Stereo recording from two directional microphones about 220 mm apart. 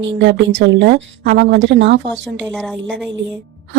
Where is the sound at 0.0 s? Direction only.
55° right (ahead or behind).